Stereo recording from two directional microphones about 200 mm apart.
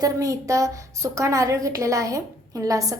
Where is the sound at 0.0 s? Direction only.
15° right (ahead or behind).